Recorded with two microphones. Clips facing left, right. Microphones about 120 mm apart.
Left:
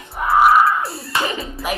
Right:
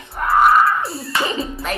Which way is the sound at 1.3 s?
25° right (ahead or behind).